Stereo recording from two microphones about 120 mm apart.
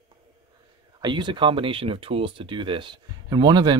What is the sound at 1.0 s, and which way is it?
Speech, 40° right (ahead or behind).